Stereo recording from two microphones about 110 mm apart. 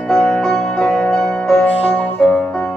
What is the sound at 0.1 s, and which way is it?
Music, centre (ahead or behind).